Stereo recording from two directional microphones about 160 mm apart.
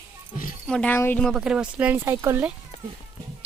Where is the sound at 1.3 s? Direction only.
5° right (ahead or behind).